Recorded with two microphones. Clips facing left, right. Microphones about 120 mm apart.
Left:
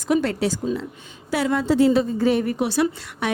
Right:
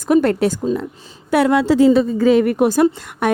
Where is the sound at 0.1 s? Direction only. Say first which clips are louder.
Right 6 dB; 55° right (ahead or behind); by 2.6 s 80° right.